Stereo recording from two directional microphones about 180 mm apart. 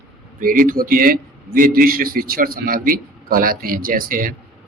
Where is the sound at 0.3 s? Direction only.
50° right (ahead or behind).